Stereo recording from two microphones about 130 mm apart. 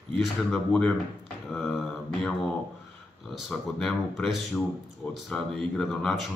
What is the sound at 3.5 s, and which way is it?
Speech, centre (ahead or behind).